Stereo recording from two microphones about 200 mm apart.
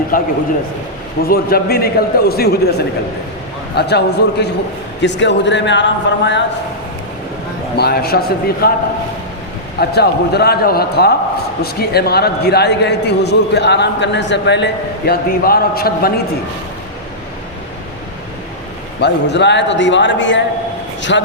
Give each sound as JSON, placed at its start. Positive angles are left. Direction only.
{"t": 0.1, "sound": "a man's voice", "side_deg": 45}
{"t": 3.8, "sound": "a man's voice", "side_deg": 55}
{"t": 7.8, "sound": "a man's voice", "side_deg": 50}
{"t": 9.9, "sound": "a man's voice", "side_deg": 55}
{"t": 18.9, "sound": "a man's voice", "side_deg": 60}